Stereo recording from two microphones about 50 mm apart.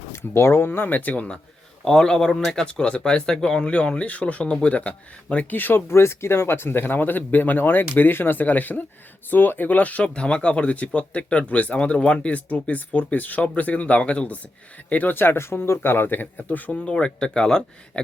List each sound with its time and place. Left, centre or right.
0.2 s speech: left
1.8 s speech: centre; by 5.8 s left
5.9 s speech: left
15.1 s speech: left
16.7 s speech: centre